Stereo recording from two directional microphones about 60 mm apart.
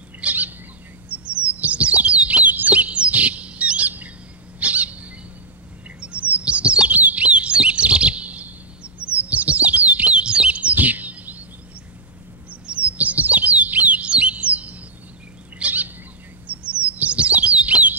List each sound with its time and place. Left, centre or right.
0.2 s bird: right
1.0 s chirp: right
4.6 s bird: right
5.9 s chirp: centre
12.4 s bird: right
16.4 s chirp: right